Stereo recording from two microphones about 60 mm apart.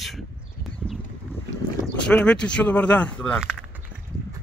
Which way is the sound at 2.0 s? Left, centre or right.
Centre.